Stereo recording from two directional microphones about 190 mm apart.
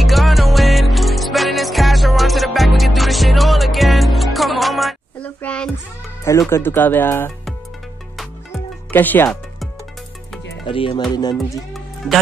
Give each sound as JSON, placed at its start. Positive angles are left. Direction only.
{"t": 0.0, "sound": "music", "side_deg": 0}
{"t": 6.5, "sound": "speech", "side_deg": 10}
{"t": 8.9, "sound": "speech", "side_deg": 10}
{"t": 10.7, "sound": "speech", "side_deg": 30}
{"t": 11.3, "sound": "music", "side_deg": 0}